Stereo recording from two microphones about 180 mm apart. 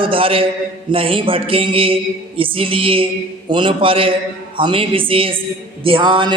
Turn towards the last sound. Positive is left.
turn(degrees=-25)  # may be behind; listen again after turning